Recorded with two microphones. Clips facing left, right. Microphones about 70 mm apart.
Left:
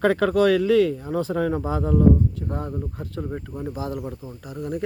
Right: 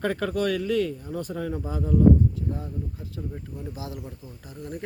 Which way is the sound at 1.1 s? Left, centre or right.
Left.